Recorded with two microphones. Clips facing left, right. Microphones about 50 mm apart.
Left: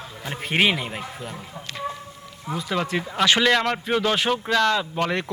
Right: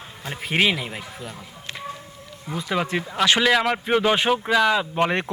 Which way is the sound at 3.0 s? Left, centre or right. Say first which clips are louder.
Left 1 dB; centre.